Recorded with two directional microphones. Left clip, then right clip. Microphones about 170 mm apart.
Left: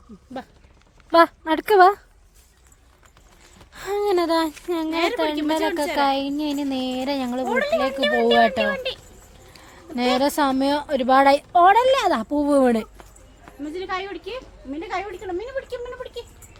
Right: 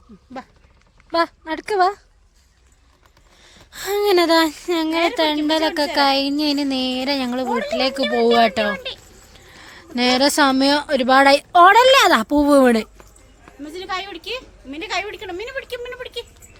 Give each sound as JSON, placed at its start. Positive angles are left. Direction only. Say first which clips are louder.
{"t": 1.1, "sound": "a woman's voice", "louder": "left 4 dB", "side_deg": 25}
{"t": 3.7, "sound": "a sound", "louder": "right 4 dB", "side_deg": -20}
{"t": 3.9, "sound": "speech", "louder": "right 5 dB", "side_deg": -40}
{"t": 8.7, "sound": "speech", "louder": "left 1 dB", "side_deg": 35}
{"t": 9.3, "sound": "a woman's voice", "louder": "right 6 dB", "side_deg": -25}
{"t": 11.5, "sound": "speech", "louder": "right 6 dB", "side_deg": -35}
{"t": 12.5, "sound": "speech", "louder": "right 4 dB", "side_deg": -25}
{"t": 13.7, "sound": "a woman's voice", "louder": "right 2 dB", "side_deg": -45}
{"t": 15.5, "sound": "a woman's voice", "louder": "right 1 dB", "side_deg": -45}